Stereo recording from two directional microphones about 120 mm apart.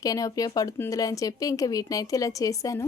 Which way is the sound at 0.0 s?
30° left (ahead or behind).